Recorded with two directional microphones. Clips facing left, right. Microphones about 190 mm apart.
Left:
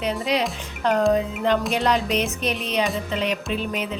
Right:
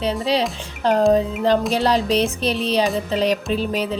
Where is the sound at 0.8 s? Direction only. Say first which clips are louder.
Right 4 dB; 30° right (ahead or behind).